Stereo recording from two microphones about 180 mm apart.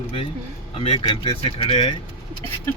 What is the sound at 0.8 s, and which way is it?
Speech, 30° left (ahead or behind).